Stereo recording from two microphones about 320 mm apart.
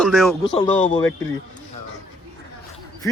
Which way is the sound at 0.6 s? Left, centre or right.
Centre.